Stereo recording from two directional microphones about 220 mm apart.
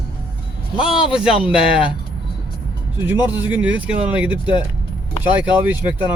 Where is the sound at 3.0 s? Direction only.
10° right (ahead or behind).